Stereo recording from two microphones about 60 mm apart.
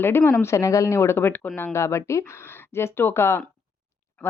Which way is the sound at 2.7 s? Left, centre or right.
Left.